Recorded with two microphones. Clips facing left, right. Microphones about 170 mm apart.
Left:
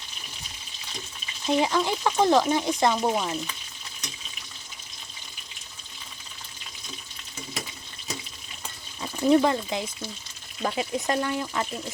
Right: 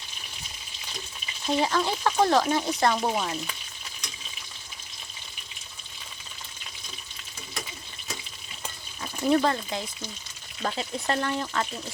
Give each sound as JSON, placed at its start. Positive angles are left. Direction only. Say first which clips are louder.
{"t": 1.5, "sound": "speech", "louder": "left 2 dB", "side_deg": 15}
{"t": 3.0, "sound": "frying", "louder": "left 2 dB", "side_deg": 5}
{"t": 9.0, "sound": "speech", "louder": "left 3 dB", "side_deg": 15}